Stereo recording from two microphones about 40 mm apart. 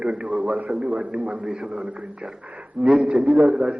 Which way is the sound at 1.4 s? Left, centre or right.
Right.